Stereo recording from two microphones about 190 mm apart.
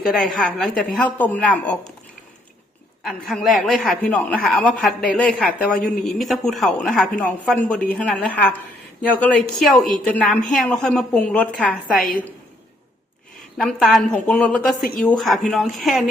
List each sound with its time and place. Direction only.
0.0 s a woman's voice: centre (ahead or behind)
3.0 s a woman's voice: centre (ahead or behind)
13.6 s a woman's voice: centre (ahead or behind)